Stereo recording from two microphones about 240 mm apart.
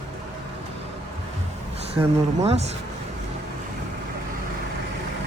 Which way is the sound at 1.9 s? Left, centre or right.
Right.